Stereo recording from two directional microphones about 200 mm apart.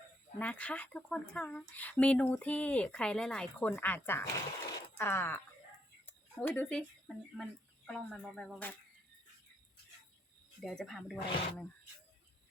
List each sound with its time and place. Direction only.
0.3 s speech: 5° left (ahead or behind)
6.1 s a sound: 10° left (ahead or behind)
7.4 s speech: centre (ahead or behind)
10.6 s speech: centre (ahead or behind)